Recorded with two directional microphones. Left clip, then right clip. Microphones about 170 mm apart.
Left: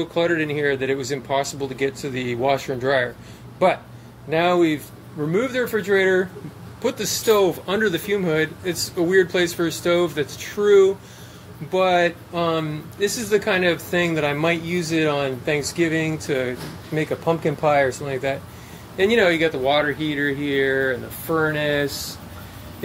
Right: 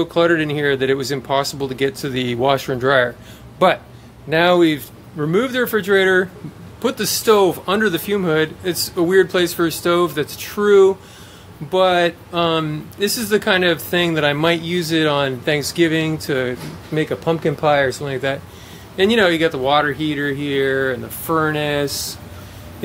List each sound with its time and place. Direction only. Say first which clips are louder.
0.0 s speech: right 5 dB; 30° right (ahead or behind)
4.3 s speech: right 4 dB; 30° right (ahead or behind)